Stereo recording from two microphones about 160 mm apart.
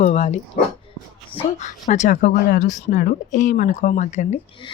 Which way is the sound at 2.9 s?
65° left (ahead or behind).